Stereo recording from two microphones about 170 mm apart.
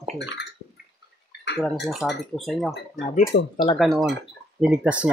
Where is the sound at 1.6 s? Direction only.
Centre (ahead or behind).